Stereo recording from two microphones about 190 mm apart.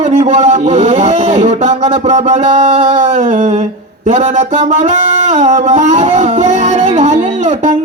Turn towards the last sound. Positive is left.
turn(degrees=-35)  # may be behind; listen again after turning